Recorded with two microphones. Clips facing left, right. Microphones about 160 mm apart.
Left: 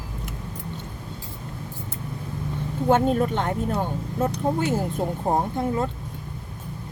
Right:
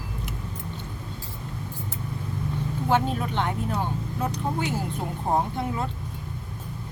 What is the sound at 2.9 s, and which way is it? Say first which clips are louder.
Speech: left 4 dB; 45° left (ahead or behind).